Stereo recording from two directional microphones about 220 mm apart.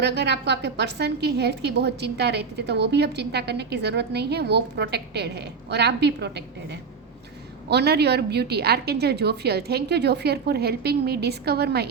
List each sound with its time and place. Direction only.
0.0 s a woman's voice: 50° right (ahead or behind)
7.7 s a woman's voice: 50° right (ahead or behind)